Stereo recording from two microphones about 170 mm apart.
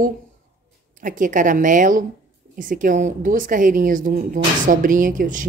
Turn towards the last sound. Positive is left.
turn(degrees=-50)  # may be behind; listen again after turning